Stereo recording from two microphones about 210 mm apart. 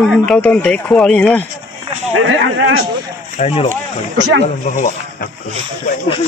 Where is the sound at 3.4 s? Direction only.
30° left (ahead or behind).